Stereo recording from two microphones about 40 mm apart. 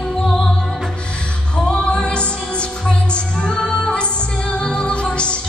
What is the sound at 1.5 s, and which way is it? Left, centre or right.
Music, left.